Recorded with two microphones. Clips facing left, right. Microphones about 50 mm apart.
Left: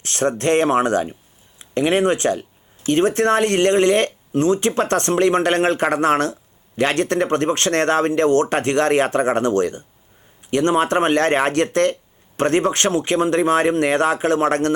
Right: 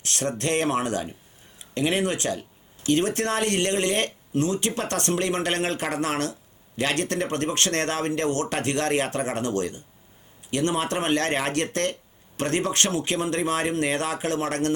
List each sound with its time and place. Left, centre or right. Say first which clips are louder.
0.0 s speech: left 8 dB; left